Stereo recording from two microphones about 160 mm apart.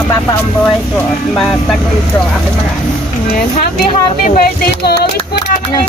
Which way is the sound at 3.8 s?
60° left (ahead or behind).